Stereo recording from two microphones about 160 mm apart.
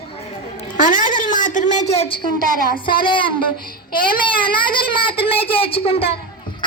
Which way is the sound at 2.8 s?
30° left (ahead or behind).